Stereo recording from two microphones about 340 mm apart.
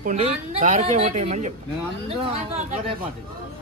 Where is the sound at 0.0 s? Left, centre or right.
Centre.